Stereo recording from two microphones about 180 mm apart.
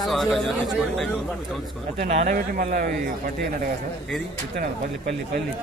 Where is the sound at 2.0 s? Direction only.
45° right (ahead or behind).